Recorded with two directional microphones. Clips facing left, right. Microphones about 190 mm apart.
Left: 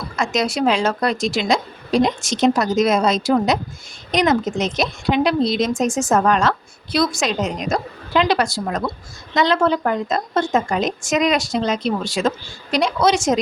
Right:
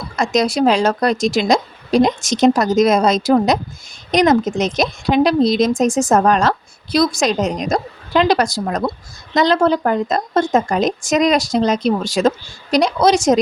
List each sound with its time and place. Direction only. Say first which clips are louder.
0.2 s a woman's voice: right 4 dB; 40° right (ahead or behind)